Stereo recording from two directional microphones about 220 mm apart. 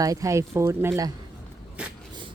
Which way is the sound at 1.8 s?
5° right (ahead or behind).